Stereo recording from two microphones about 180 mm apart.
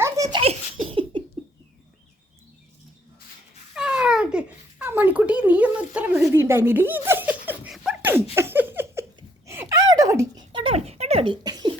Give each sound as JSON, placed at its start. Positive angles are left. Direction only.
{"t": 0.0, "sound": "giggle", "side_deg": -20}
{"t": 3.8, "sound": "babbling", "side_deg": -5}
{"t": 9.5, "sound": "a sound", "side_deg": -15}